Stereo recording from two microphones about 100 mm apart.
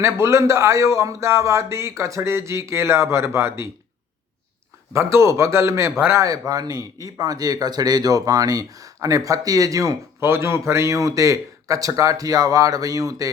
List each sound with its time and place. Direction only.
0.0 s speech: 30° right (ahead or behind)
4.9 s speech: 30° right (ahead or behind)